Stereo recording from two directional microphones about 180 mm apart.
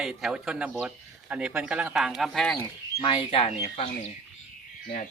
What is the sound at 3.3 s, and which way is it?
Speech, 30° left (ahead or behind).